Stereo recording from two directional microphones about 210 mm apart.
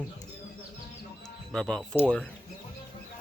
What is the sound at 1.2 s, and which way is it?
Speech, 5° left (ahead or behind).